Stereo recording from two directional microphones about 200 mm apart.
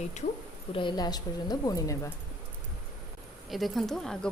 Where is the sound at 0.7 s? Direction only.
25° left (ahead or behind).